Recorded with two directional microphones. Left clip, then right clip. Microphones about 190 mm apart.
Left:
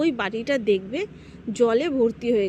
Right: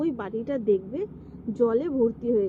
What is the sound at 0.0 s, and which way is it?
Speech, 40° left (ahead or behind).